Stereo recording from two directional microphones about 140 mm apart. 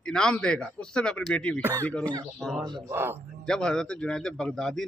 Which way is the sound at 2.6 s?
30° right (ahead or behind).